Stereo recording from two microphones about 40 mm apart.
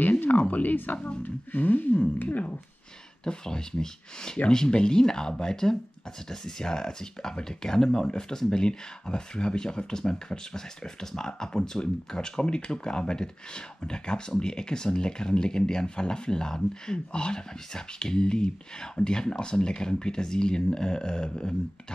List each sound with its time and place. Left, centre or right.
0.0 s a sound: left
0.5 s speech: left
3.3 s speech: centre